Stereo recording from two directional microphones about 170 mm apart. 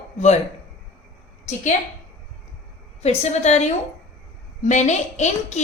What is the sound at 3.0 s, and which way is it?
A woman's voice, 40° left (ahead or behind).